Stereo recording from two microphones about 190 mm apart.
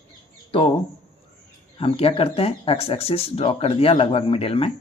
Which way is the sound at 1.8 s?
30° left (ahead or behind).